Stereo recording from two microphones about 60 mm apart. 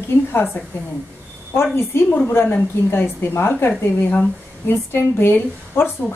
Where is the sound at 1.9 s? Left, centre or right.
Left.